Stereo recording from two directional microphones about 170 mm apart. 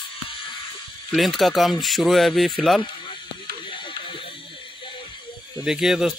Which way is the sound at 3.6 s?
30° left (ahead or behind).